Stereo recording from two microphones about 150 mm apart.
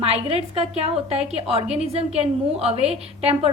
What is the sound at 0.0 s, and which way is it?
A woman's voice, 40° right (ahead or behind).